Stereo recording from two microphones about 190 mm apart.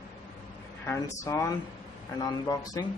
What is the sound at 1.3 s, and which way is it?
A man's voice, 15° left (ahead or behind).